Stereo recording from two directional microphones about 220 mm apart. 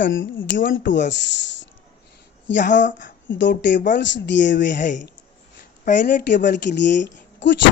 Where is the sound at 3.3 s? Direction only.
55° left (ahead or behind).